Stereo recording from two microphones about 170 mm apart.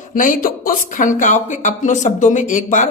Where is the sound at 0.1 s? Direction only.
50° left (ahead or behind).